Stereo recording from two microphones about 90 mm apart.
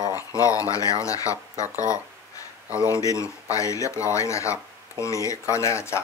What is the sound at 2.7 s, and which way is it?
Speech, 35° left (ahead or behind).